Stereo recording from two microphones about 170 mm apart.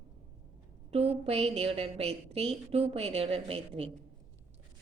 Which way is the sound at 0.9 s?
35° right (ahead or behind).